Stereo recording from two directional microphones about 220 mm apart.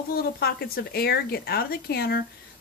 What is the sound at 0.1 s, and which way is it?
Speech, 45° left (ahead or behind).